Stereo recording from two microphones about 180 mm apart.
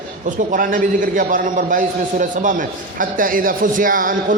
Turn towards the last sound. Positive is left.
turn(degrees=-50)  # may be behind; listen again after turning